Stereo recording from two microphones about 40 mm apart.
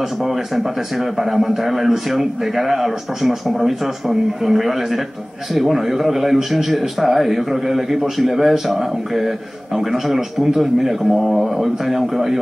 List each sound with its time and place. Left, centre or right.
0.9 s a man's voice: centre